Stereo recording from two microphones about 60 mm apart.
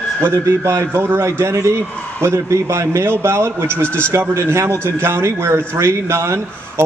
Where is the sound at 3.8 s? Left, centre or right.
Left.